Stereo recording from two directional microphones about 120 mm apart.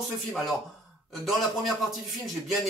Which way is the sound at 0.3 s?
Centre (ahead or behind).